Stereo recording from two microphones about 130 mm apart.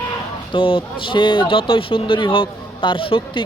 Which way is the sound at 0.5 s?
45° left (ahead or behind).